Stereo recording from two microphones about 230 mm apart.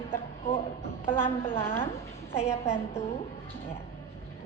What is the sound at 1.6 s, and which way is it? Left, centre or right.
Speech, centre.